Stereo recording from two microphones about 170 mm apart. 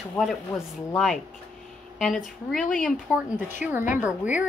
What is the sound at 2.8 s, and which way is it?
Speech, centre (ahead or behind).